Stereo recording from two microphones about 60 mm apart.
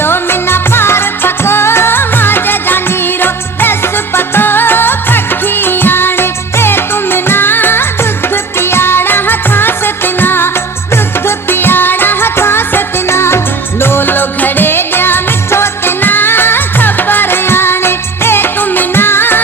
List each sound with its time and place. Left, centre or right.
0.0 s music: left